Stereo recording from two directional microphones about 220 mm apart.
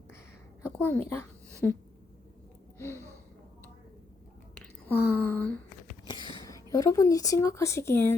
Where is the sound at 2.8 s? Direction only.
10° left (ahead or behind).